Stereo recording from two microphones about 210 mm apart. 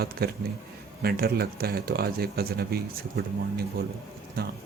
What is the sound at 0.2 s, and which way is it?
Speech, 45° right (ahead or behind).